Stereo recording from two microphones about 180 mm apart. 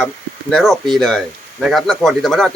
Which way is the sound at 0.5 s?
Centre (ahead or behind).